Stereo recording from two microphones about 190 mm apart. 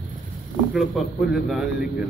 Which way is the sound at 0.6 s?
Centre (ahead or behind).